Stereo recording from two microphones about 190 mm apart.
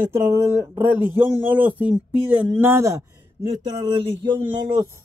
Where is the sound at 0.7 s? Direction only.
10° right (ahead or behind).